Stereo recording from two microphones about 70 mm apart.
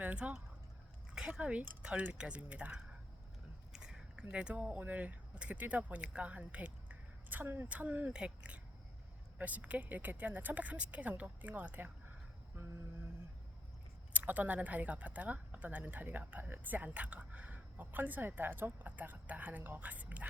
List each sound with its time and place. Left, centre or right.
0.0 s speech: right
7.7 s speech: right
12.5 s a sound: right
14.1 s speech: right